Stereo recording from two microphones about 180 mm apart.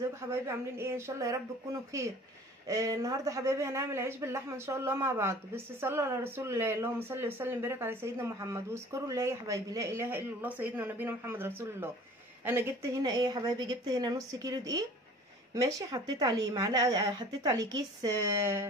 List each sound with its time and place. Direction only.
0.2 s a woman's voice: 15° right (ahead or behind)